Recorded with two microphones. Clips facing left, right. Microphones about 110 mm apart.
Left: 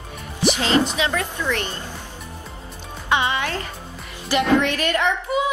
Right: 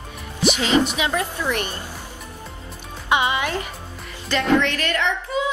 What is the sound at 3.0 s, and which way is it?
Speech, 15° right (ahead or behind).